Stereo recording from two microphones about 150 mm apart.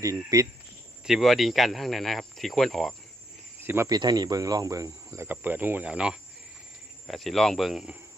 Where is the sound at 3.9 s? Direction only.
25° right (ahead or behind); by 8.0 s centre (ahead or behind).